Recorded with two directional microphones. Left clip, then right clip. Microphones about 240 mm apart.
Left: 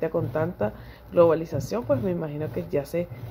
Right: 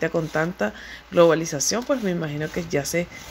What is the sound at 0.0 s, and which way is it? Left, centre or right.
Speech, right.